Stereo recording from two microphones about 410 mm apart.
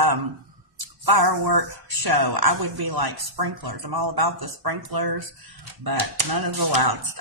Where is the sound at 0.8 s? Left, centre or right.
Right.